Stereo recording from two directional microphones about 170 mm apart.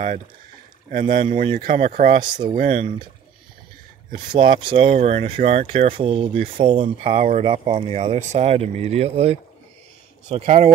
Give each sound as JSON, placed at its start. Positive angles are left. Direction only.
{"t": 0.8, "sound": "speech", "side_deg": -50}
{"t": 2.1, "sound": "speech", "side_deg": -25}
{"t": 2.5, "sound": "speech", "side_deg": -50}
{"t": 4.1, "sound": "speech", "side_deg": -30}